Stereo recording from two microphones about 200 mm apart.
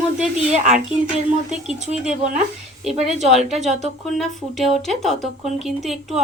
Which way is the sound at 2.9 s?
35° right (ahead or behind).